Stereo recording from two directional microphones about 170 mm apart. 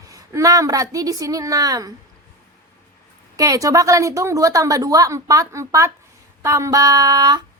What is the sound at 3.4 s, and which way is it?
A woman's voice, 20° right (ahead or behind).